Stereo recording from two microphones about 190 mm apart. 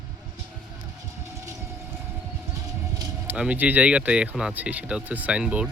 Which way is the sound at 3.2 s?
10° right (ahead or behind).